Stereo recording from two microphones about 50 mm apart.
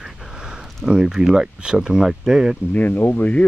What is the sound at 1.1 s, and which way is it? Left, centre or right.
Speech, centre.